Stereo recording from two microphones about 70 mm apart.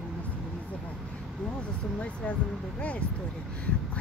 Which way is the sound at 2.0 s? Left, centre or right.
Centre.